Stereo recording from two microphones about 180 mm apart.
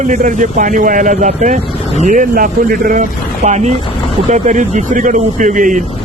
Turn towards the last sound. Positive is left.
turn(degrees=-45)  # may be behind; listen again after turning